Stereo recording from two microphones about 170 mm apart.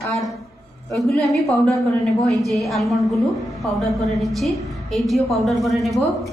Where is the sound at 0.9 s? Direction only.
Centre (ahead or behind).